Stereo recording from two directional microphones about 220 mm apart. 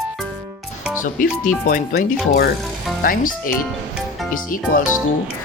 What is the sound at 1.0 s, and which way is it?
Speech, 40° left (ahead or behind).